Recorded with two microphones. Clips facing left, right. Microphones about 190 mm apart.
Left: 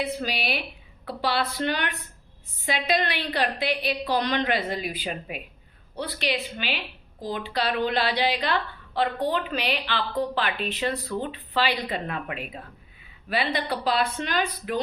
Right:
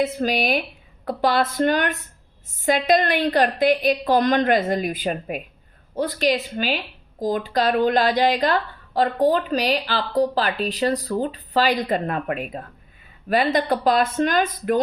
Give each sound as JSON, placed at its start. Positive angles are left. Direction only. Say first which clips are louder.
{"t": 0.0, "sound": "speech", "louder": "right 7 dB", "side_deg": -45}